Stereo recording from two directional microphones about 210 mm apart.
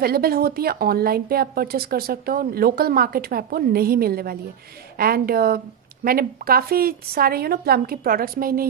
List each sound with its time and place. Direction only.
0.0 s a woman's voice: 45° right (ahead or behind)